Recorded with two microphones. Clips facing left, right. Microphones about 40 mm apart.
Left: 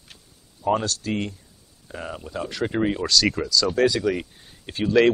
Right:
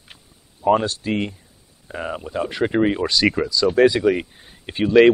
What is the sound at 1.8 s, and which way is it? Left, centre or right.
Speech, right.